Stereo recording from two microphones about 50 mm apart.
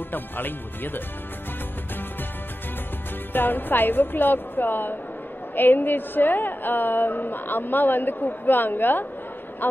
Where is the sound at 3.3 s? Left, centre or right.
Left.